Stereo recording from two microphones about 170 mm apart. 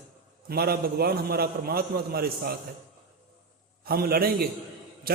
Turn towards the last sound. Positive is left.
turn(degrees=-65)  # may be behind; listen again after turning